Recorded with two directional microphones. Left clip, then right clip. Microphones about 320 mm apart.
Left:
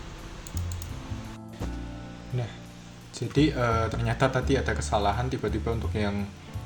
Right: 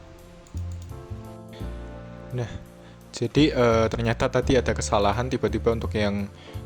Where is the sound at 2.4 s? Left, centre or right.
Right.